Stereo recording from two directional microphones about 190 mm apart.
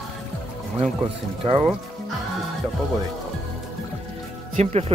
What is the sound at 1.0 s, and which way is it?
Speech, 30° right (ahead or behind).